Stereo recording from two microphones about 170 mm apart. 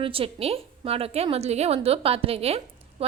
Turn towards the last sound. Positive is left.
turn(degrees=-35)  # may be behind; listen again after turning